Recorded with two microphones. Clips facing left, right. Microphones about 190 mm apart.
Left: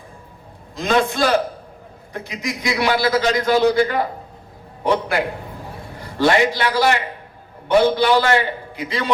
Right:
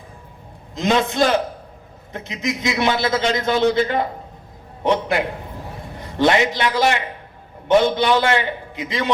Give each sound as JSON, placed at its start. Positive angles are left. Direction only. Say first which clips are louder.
{"t": 0.8, "sound": "a man's voice", "louder": "even", "side_deg": -20}